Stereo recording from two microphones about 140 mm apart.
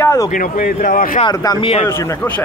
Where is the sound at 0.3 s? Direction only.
80° left.